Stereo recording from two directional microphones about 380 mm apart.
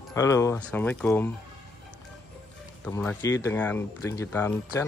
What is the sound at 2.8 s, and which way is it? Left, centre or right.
Speech, centre.